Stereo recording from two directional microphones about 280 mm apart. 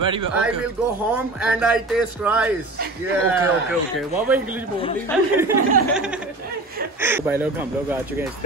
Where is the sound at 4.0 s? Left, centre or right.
Centre.